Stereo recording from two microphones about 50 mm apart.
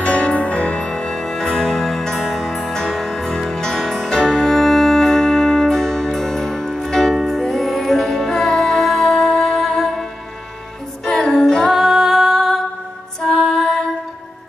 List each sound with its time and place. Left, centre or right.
0.0 s music: left; by 10.0 s centre
11.1 s music: centre
11.3 s singing: centre
11.7 s music: centre
13.2 s music: centre